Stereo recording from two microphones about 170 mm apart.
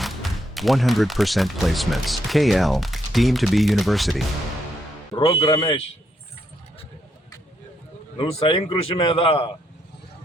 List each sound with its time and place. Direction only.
0.0 s speech: centre (ahead or behind)
5.1 s a man's voice: 30° left (ahead or behind)
8.2 s a man's voice: 35° left (ahead or behind)